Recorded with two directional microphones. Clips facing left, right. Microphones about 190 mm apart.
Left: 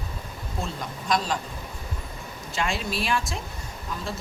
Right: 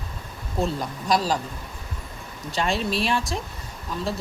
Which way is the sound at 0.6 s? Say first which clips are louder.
Right 6 dB; 35° right (ahead or behind).